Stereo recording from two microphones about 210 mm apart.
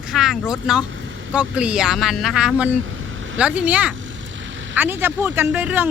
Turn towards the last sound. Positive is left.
turn(degrees=-5)  # may be behind; listen again after turning